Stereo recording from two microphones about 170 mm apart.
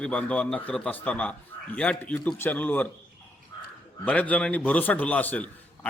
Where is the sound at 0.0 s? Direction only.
5° left (ahead or behind).